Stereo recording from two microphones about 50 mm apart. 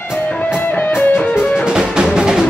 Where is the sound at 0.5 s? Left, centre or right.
Left.